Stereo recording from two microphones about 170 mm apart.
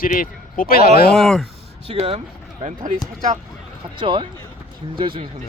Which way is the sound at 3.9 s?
30° right (ahead or behind).